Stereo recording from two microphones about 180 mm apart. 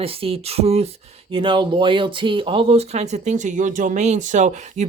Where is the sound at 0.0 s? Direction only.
30° right (ahead or behind).